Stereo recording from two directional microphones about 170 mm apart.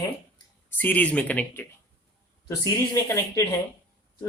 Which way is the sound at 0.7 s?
10° left (ahead or behind).